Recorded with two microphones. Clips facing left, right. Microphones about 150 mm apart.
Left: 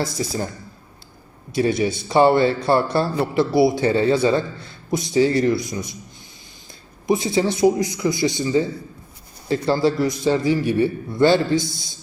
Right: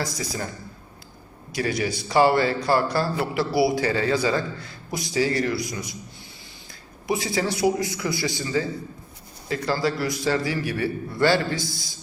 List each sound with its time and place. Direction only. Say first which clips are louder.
0.0 s a man's voice: left 5 dB; 25° left (ahead or behind)
1.5 s a man's voice: left 6 dB; 25° left (ahead or behind)
7.1 s a man's voice: left 5 dB; 20° left (ahead or behind)